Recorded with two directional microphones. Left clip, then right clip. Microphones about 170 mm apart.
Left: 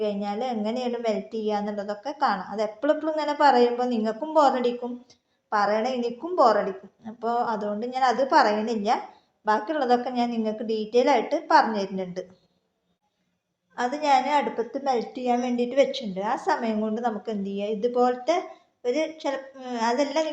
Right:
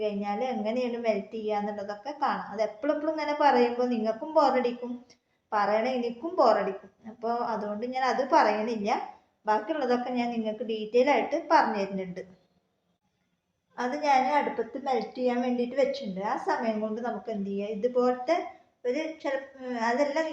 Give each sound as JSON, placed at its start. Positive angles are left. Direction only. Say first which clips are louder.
{"t": 0.0, "sound": "a woman's voice", "louder": "left 2 dB", "side_deg": 35}
{"t": 13.7, "sound": "a woman's voice", "louder": "left 3 dB", "side_deg": 40}